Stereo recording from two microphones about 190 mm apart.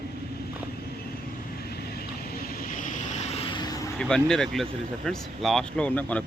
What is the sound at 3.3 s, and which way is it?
Vehicle, 25° left (ahead or behind).